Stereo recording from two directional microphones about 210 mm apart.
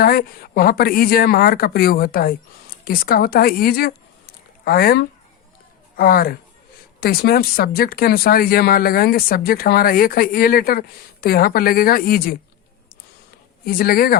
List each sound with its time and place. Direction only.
0.0 s a woman's voice: 45° left (ahead or behind)
13.7 s speech: 45° left (ahead or behind)